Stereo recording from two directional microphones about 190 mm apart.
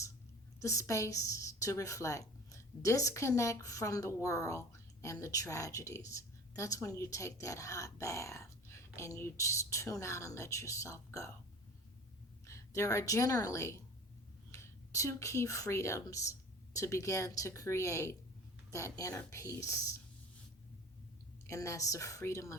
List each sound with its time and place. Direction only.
0.6 s a woman's voice: 15° left (ahead or behind)
12.5 s a woman's voice: 15° left (ahead or behind)
21.4 s a woman's voice: 15° left (ahead or behind)